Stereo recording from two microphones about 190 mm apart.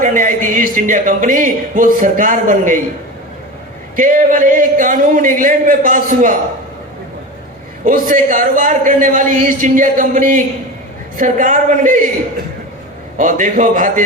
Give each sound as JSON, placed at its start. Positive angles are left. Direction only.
{"t": 0.0, "sound": "speech", "side_deg": -45}
{"t": 3.9, "sound": "speech", "side_deg": -45}
{"t": 7.9, "sound": "speech", "side_deg": -45}
{"t": 13.1, "sound": "speech", "side_deg": -40}